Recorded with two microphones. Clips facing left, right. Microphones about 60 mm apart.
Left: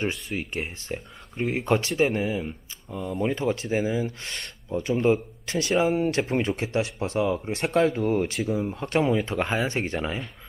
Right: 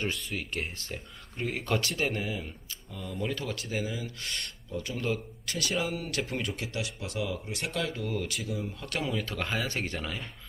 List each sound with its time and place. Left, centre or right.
0.3 s speech: centre